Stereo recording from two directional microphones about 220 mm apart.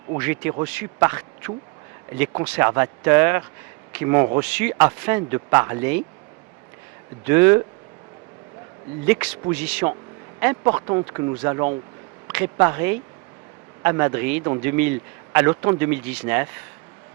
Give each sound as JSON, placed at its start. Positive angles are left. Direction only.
{"t": 0.2, "sound": "a man's voice", "side_deg": -10}
{"t": 7.3, "sound": "a man's voice", "side_deg": -15}
{"t": 9.0, "sound": "a man's voice", "side_deg": -10}